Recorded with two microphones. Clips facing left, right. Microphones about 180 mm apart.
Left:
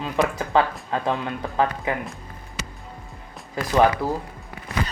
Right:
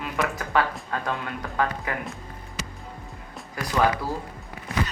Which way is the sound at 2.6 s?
65° left (ahead or behind).